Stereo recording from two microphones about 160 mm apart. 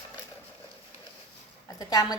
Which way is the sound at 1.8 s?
25° left (ahead or behind).